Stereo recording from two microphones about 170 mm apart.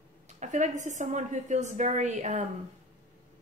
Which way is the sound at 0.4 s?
45° right (ahead or behind).